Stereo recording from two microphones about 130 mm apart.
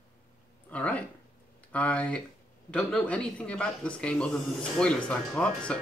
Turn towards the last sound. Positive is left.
turn(degrees=10)  # may be behind; listen again after turning